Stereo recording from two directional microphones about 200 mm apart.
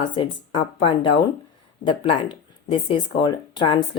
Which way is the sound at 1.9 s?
25° left (ahead or behind).